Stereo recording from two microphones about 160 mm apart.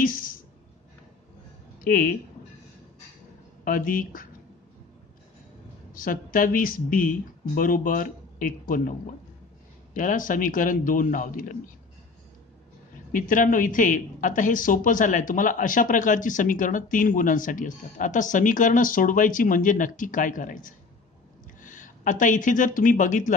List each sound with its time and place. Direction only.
0.0 s a sound: 60° left (ahead or behind)
1.9 s speech: 60° left (ahead or behind)
3.6 s speech: 60° left (ahead or behind)
5.9 s speech: 60° left (ahead or behind)
13.1 s speech: 55° left (ahead or behind)